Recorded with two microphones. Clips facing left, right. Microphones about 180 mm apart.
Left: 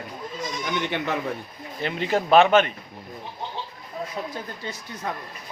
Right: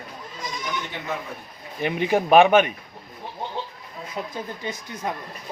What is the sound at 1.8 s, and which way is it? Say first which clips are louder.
Speech: right 3 dB; 15° right (ahead or behind).